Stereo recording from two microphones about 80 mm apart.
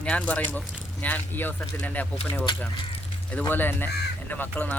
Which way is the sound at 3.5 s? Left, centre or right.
Left.